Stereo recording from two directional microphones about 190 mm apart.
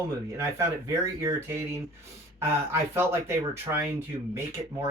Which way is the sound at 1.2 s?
15° right (ahead or behind).